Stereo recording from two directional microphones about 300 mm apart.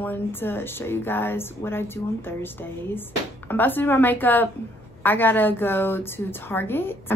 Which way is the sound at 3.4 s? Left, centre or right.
Centre.